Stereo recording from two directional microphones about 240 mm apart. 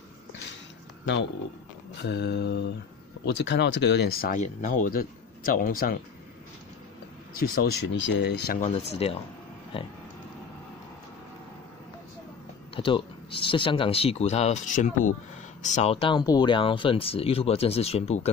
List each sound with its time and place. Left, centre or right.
2.0 s mantra: left
3.3 s speech: left
7.4 s speech: left
8.6 s speech: left
12.7 s speech: left